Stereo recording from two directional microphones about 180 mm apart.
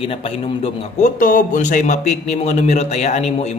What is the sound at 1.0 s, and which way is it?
Speech, 45° left (ahead or behind).